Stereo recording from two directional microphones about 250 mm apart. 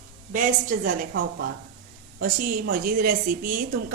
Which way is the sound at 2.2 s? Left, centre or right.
Right.